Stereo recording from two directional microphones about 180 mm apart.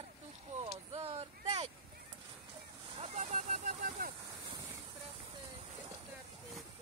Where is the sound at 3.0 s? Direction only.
35° right (ahead or behind).